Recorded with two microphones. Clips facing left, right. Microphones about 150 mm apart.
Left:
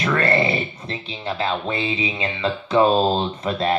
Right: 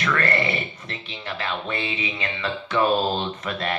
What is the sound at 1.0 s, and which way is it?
Speech, 35° left (ahead or behind).